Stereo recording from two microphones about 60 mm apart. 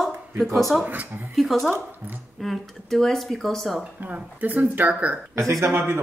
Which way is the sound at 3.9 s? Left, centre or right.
Right.